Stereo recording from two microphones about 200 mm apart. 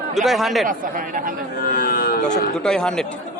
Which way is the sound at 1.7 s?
45° left (ahead or behind).